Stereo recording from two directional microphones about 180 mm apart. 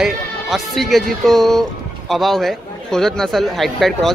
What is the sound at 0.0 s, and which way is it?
Speech, centre (ahead or behind).